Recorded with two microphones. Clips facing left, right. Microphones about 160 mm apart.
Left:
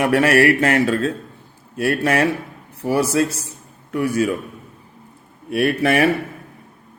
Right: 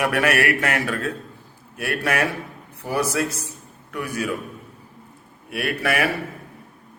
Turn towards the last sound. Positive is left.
turn(degrees=30)  # may be behind; listen again after turning